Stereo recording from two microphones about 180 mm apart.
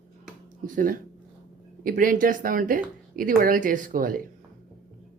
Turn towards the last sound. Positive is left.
turn(degrees=-50)  # may be behind; listen again after turning